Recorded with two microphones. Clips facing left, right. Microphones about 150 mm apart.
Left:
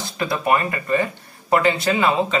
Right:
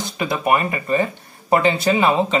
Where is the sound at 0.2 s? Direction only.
15° right (ahead or behind).